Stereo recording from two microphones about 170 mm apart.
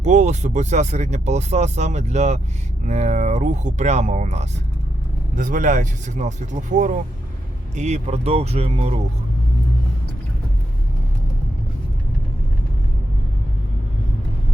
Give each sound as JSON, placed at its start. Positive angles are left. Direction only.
{"t": 0.0, "sound": "speech", "side_deg": -45}